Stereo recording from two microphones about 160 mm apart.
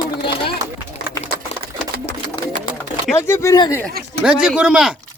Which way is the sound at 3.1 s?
15° left (ahead or behind).